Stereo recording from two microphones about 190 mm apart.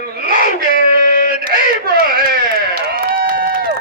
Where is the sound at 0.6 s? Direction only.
45° left (ahead or behind).